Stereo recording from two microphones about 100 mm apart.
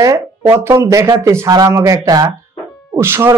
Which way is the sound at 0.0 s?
30° right (ahead or behind).